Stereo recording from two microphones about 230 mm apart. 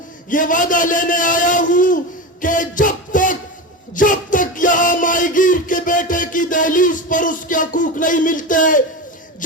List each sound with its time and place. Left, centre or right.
0.3 s a man's voice: left
2.4 s music: left